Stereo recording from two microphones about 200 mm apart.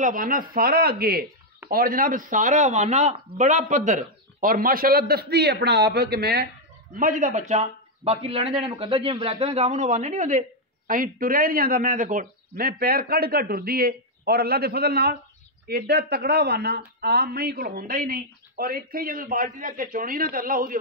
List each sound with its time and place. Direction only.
0.0 s speech: 45° right (ahead or behind)
7.0 s a man's voice: 40° right (ahead or behind)